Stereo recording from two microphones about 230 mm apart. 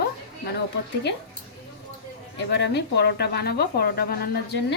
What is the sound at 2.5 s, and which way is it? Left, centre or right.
A woman's voice, left.